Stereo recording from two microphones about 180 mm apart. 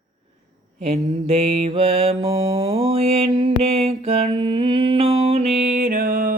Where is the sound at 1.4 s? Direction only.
35° right (ahead or behind).